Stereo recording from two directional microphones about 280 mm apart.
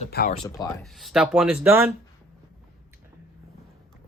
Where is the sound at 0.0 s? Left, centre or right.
Left.